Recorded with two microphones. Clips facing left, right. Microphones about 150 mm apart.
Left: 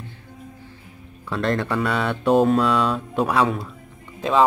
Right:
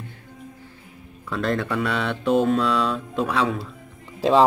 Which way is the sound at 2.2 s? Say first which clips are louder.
Left 3 dB; 40° left (ahead or behind).